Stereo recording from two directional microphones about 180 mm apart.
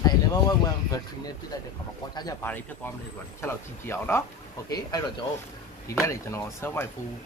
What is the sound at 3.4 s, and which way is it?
Speech, 15° left (ahead or behind).